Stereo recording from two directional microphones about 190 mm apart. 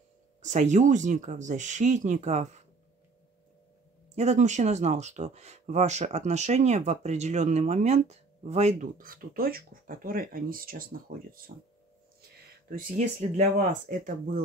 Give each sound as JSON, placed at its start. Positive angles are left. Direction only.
{"t": 0.4, "sound": "speech", "side_deg": -40}
{"t": 4.1, "sound": "speech", "side_deg": -35}
{"t": 12.2, "sound": "a sound", "side_deg": -50}
{"t": 13.6, "sound": "speech", "side_deg": -45}